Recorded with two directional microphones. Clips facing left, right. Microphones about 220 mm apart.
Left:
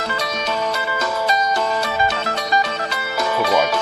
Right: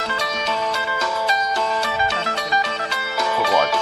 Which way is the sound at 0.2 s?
40° left (ahead or behind).